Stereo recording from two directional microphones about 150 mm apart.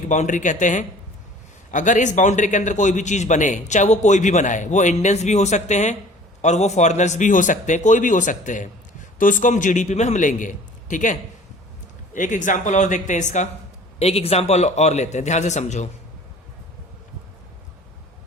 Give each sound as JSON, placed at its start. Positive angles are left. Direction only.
{"t": 0.1, "sound": "a man's voice", "side_deg": 55}
{"t": 14.0, "sound": "a man's voice", "side_deg": 40}